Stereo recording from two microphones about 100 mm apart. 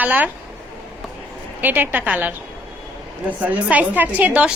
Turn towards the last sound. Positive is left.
turn(degrees=-15)  # may be behind; listen again after turning